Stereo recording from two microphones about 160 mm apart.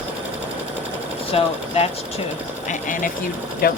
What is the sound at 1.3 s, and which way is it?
Speech, 40° left (ahead or behind).